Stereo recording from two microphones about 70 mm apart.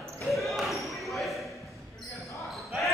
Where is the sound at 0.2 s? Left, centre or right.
Centre.